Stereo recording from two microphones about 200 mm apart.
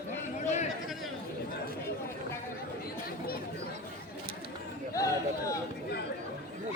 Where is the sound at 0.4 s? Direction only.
35° left (ahead or behind).